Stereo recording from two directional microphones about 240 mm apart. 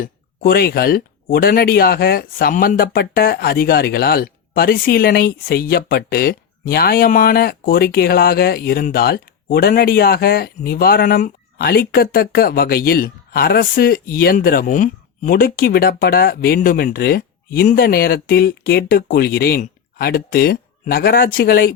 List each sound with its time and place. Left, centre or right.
0.0 s speech: left